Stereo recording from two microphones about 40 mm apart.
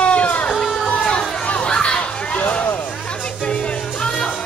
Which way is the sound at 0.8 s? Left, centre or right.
Left.